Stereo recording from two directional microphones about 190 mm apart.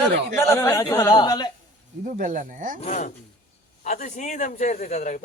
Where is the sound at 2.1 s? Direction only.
45° right (ahead or behind).